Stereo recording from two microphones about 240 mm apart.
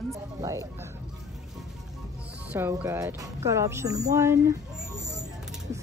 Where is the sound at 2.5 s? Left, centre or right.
Centre.